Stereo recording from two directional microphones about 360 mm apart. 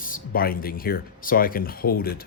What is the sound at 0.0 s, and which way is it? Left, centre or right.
Speech, left.